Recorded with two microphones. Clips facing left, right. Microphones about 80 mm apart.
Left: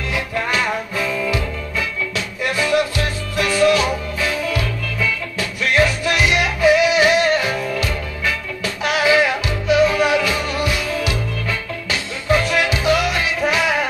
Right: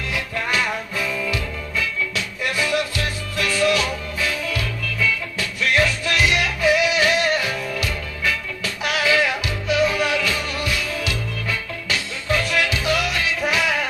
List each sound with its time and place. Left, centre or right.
0.1 s music: left